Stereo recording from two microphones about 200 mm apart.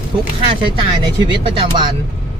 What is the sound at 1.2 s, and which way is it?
Speech, 20° right (ahead or behind).